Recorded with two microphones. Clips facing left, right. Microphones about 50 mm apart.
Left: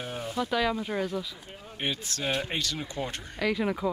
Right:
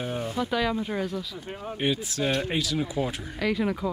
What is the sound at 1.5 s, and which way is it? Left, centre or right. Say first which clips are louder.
Speech: right 10 dB; right.